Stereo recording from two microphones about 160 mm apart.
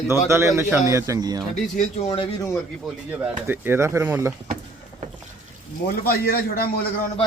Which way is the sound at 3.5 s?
15° right (ahead or behind).